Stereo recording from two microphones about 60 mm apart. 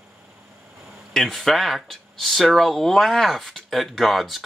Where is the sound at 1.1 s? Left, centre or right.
Centre.